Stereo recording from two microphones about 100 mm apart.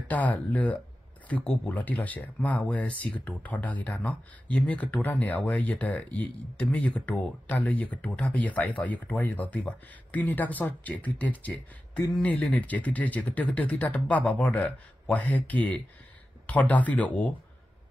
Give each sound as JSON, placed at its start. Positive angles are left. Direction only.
{"t": 0.1, "sound": "speech", "side_deg": 15}